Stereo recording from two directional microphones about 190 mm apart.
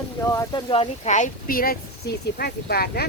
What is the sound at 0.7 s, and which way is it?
Speech, 35° left (ahead or behind).